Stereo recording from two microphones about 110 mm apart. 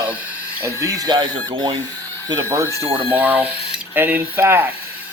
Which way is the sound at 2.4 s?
30° right (ahead or behind).